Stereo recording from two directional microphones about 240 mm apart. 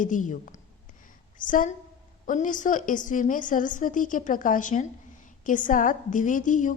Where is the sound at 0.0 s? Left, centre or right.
Left.